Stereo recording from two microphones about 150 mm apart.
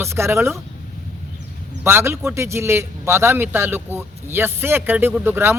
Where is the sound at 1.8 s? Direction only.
15° right (ahead or behind).